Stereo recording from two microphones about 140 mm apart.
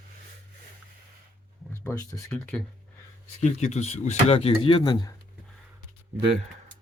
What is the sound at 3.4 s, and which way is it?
Speech, 55° left (ahead or behind).